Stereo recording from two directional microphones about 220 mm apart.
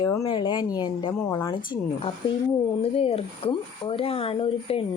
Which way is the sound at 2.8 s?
25° left (ahead or behind).